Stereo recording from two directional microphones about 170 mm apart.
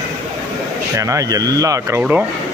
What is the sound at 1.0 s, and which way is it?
Speech, 20° right (ahead or behind).